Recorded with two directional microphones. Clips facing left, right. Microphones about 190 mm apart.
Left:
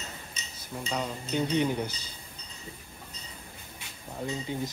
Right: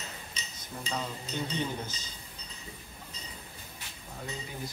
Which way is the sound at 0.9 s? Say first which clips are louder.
Left 5 dB; 15° left (ahead or behind).